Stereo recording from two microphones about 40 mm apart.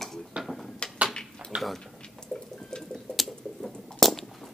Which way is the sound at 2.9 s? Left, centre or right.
Centre.